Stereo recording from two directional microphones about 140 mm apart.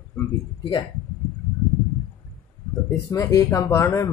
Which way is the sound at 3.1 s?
25° left (ahead or behind).